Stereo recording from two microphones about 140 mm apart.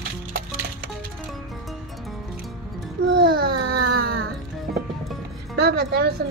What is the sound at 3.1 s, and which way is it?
Baby cry, 90° right.